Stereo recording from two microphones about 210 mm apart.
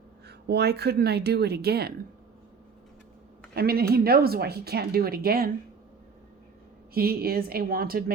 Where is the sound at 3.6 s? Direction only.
45° right (ahead or behind).